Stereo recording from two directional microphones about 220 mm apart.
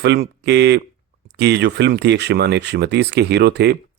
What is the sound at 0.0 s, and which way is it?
Speech, 50° right (ahead or behind).